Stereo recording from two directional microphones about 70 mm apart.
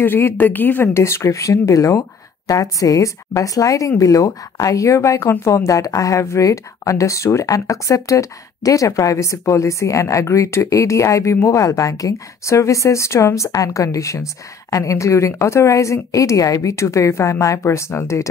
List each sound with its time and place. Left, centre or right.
0.0 s speech: left
0.9 s speech: left